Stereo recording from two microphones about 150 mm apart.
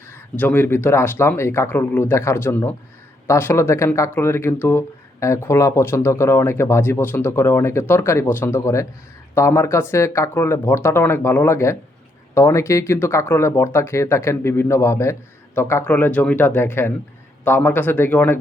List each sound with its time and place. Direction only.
0.1 s speech: 15° left (ahead or behind)